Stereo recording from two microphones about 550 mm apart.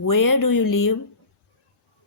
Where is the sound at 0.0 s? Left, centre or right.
Left.